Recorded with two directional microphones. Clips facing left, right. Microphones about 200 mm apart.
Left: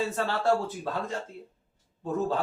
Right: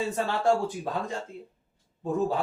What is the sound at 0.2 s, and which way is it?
Speech, 15° right (ahead or behind).